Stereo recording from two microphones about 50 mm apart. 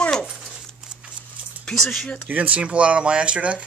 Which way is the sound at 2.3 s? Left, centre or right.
Right.